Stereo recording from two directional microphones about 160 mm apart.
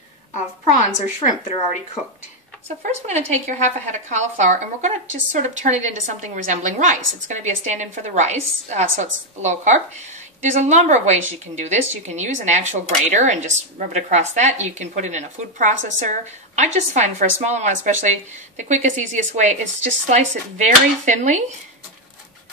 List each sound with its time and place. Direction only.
0.9 s a woman's voice: 50° left (ahead or behind)
2.8 s a woman's voice: 45° right (ahead or behind)